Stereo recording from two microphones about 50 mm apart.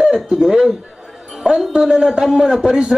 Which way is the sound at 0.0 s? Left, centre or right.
Centre.